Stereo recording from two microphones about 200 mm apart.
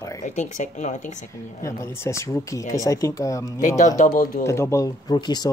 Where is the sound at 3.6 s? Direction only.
35° left (ahead or behind).